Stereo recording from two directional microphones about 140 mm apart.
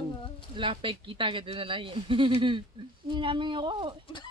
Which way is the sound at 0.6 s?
35° right (ahead or behind).